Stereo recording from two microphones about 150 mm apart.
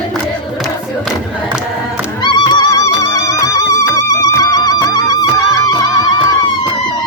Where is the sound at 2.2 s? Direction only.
30° left (ahead or behind).